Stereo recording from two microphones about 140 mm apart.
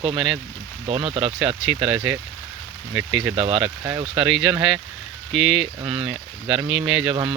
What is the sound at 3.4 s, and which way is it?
Speech, 40° right (ahead or behind).